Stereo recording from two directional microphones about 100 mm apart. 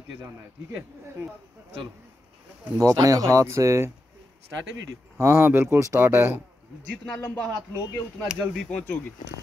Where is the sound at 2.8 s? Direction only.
35° right (ahead or behind).